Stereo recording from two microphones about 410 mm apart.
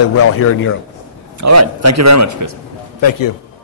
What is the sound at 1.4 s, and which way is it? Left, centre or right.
A man's voice, right.